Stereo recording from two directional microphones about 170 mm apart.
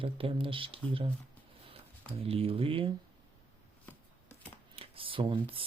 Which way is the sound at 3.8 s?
10° left (ahead or behind).